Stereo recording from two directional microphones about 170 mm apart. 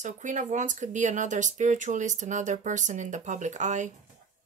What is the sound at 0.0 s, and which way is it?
Speech, 45° right (ahead or behind).